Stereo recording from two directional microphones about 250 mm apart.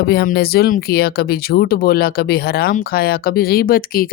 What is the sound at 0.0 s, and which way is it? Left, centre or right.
Speech, left.